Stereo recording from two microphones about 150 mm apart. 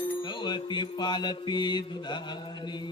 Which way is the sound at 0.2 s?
30° left (ahead or behind).